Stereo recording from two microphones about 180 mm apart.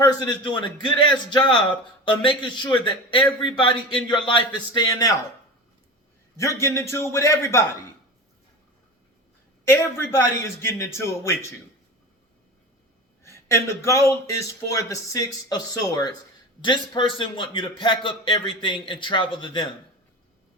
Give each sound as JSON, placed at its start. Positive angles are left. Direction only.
{"t": 0.0, "sound": "a man's voice", "side_deg": 25}
{"t": 6.3, "sound": "a man's voice", "side_deg": 15}
{"t": 9.6, "sound": "a man's voice", "side_deg": 15}
{"t": 13.2, "sound": "a man's voice", "side_deg": 15}